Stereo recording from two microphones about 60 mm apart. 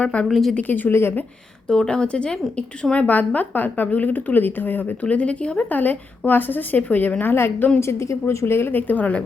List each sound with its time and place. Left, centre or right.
0.0 s a woman's voice: left
0.3 s speech: centre
0.5 s speech: left
1.6 s a woman's voice: centre; by 7.7 s left
7.8 s a woman's voice: left